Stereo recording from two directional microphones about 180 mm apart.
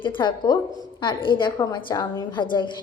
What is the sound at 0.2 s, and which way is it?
A woman's voice, 25° left (ahead or behind).